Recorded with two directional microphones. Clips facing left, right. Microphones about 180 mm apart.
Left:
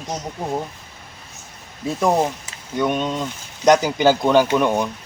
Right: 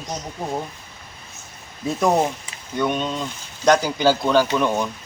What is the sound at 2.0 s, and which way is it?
Speech, 5° left (ahead or behind).